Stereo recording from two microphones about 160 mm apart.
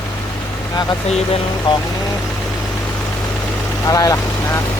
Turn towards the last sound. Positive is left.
turn(degrees=20)  # may be behind; listen again after turning